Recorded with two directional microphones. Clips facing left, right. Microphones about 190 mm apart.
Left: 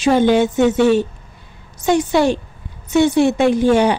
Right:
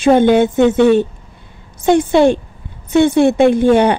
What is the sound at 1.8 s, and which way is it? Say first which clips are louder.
A woman's voice: right 4 dB; 55° right (ahead or behind).